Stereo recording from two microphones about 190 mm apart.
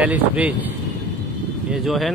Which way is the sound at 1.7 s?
Centre (ahead or behind).